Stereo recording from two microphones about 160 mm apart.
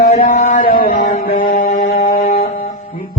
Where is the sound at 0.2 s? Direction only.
60° left (ahead or behind).